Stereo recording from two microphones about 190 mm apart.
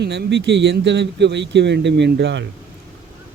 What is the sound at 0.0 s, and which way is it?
Speech, 65° right (ahead or behind).